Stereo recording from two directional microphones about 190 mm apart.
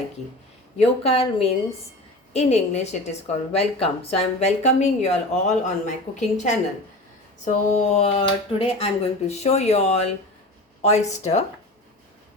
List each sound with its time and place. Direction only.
0.8 s a woman's voice: 30° left (ahead or behind)